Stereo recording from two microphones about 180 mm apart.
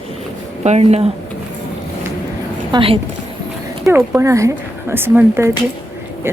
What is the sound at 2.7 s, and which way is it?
Speech, 30° right (ahead or behind).